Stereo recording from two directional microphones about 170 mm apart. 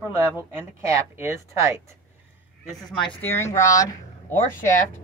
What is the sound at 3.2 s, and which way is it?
Speech, 15° left (ahead or behind).